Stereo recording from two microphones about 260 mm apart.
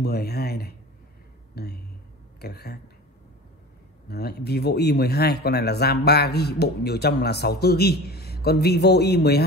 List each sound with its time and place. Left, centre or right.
0.0 s speech: left
4.1 s speech: left